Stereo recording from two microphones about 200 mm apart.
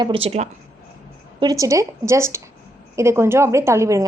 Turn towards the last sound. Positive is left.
turn(degrees=-15)  # may be behind; listen again after turning